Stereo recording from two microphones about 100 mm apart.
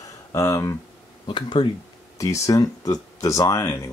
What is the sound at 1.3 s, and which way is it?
Speech, 55° left (ahead or behind).